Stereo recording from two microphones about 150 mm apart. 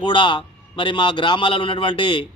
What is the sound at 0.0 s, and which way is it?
A man's voice, 35° left (ahead or behind).